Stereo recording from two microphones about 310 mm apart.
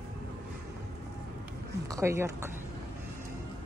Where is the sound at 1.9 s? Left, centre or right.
Centre.